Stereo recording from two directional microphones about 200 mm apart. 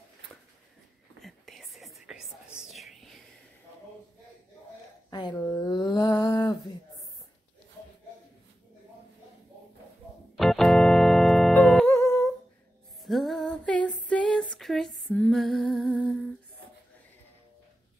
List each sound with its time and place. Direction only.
1.2 s whispering: centre (ahead or behind)
5.1 s a sound: 15° left (ahead or behind)
10.3 s organ: centre (ahead or behind)
11.5 s music: 5° left (ahead or behind)
13.0 s female singing: centre (ahead or behind)